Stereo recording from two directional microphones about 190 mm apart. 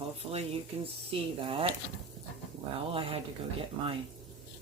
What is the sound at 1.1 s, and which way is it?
Speech, 30° right (ahead or behind).